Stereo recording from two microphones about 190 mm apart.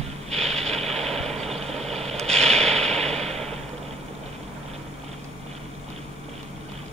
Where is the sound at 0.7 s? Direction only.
Centre (ahead or behind).